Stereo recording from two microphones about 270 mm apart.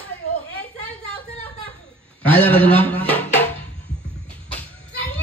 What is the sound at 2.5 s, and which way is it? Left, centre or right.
Speech, centre.